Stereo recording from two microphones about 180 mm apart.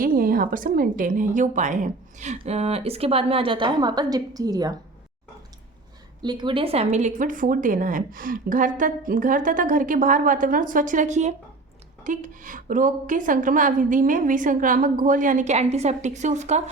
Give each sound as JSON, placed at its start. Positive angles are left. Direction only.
{"t": 0.0, "sound": "a woman's voice", "side_deg": -50}
{"t": 6.2, "sound": "a woman's voice", "side_deg": -25}